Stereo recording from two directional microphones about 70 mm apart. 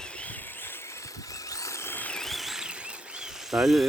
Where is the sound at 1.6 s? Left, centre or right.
Left.